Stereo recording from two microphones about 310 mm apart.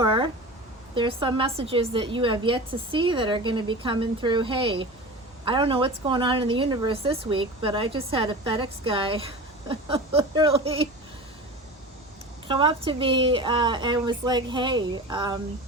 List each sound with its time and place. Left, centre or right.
0.0 s a sound: centre
0.9 s a woman's voice: centre
12.5 s a woman's voice: centre